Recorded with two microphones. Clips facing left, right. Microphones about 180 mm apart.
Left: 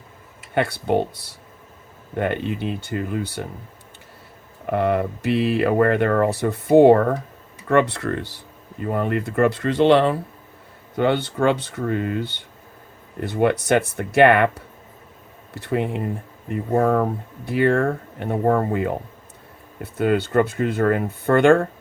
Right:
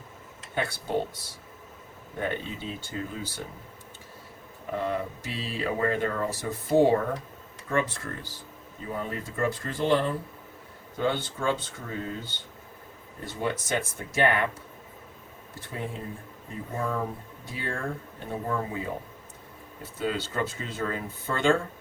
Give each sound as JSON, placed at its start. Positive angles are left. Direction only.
{"t": 0.5, "sound": "speech", "side_deg": 65}
{"t": 4.6, "sound": "speech", "side_deg": 70}
{"t": 10.9, "sound": "speech", "side_deg": 65}